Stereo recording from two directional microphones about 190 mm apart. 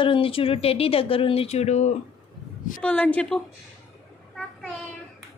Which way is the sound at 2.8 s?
10° left (ahead or behind).